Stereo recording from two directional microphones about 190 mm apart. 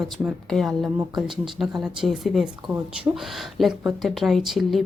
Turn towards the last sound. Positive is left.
turn(degrees=0)  # may be behind; listen again after turning